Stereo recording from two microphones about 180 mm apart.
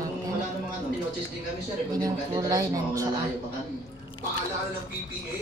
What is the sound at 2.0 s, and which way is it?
A man's voice, 20° right (ahead or behind).